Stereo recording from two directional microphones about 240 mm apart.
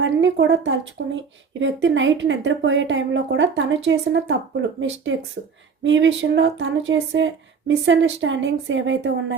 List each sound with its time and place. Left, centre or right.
0.0 s speech: right